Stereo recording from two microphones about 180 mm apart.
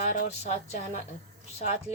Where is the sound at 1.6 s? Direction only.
35° left (ahead or behind).